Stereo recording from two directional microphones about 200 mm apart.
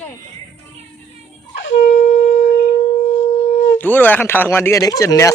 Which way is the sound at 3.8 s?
10° left (ahead or behind).